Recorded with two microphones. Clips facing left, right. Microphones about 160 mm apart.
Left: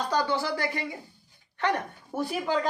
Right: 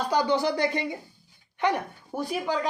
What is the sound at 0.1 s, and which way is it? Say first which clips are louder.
A woman's voice: right 5 dB; 15° right (ahead or behind).